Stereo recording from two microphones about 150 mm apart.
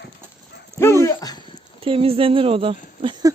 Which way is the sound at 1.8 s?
40° right (ahead or behind).